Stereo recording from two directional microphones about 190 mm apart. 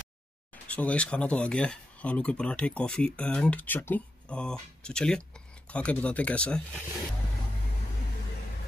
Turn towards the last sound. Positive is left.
turn(degrees=5)  # may be behind; listen again after turning